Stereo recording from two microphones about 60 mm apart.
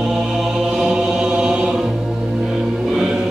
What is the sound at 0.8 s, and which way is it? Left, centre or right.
Chant, centre.